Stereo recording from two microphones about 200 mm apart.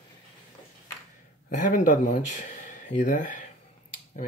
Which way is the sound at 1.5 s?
40° left (ahead or behind).